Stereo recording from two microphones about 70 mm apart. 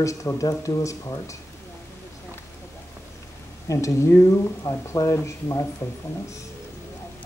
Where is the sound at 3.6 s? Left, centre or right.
Left.